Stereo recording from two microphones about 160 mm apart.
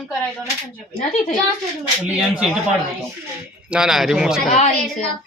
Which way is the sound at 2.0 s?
10° right (ahead or behind).